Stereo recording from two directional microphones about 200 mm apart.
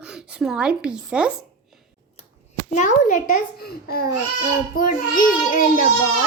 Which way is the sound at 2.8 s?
40° left (ahead or behind).